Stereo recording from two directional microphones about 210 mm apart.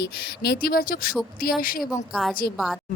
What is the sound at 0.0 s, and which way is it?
A woman's voice, 50° left (ahead or behind).